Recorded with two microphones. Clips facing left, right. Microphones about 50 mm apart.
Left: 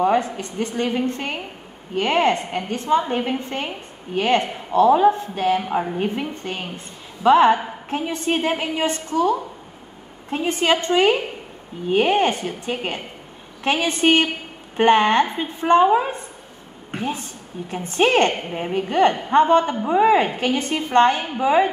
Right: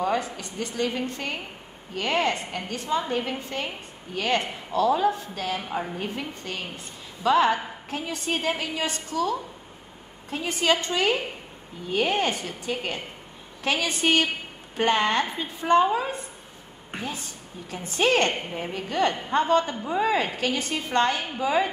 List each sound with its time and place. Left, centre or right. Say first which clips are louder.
0.0 s a woman's voice: left 7 dB; left